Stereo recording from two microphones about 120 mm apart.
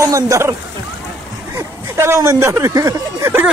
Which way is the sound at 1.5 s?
25° right (ahead or behind).